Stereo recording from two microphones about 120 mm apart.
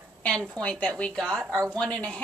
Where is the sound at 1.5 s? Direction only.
25° right (ahead or behind).